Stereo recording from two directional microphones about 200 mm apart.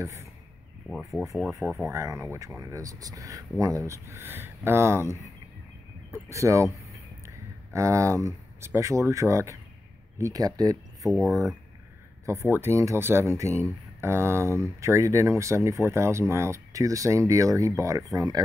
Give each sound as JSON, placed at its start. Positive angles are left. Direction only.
{"t": 0.0, "sound": "speech", "side_deg": -15}
{"t": 0.8, "sound": "speech", "side_deg": 0}
{"t": 1.9, "sound": "speech", "side_deg": -15}
{"t": 6.1, "sound": "speech", "side_deg": -15}
{"t": 11.1, "sound": "speech", "side_deg": 0}
{"t": 12.3, "sound": "speech", "side_deg": -10}